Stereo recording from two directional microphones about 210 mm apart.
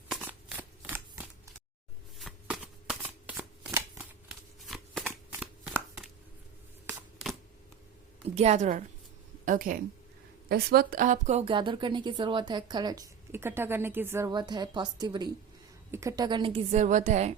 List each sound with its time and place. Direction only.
0.1 s shuffling cards: 10° right (ahead or behind)
6.8 s a sound: centre (ahead or behind)
8.4 s a woman's voice: 30° right (ahead or behind)